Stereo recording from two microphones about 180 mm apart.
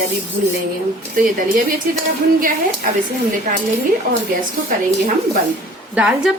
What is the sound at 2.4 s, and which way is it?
Speech, 50° right (ahead or behind).